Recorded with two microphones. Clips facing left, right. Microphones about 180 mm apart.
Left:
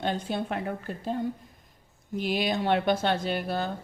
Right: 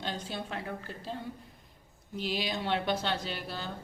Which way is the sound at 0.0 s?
55° left (ahead or behind).